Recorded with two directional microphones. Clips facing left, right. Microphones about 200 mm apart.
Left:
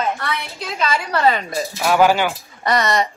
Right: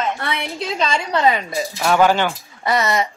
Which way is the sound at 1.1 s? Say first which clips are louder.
Even; 15° right (ahead or behind).